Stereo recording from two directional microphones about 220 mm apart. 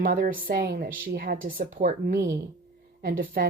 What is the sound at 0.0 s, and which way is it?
A woman's voice, 40° right (ahead or behind).